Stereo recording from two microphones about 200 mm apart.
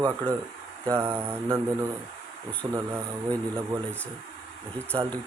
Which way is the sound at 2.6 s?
20° right (ahead or behind).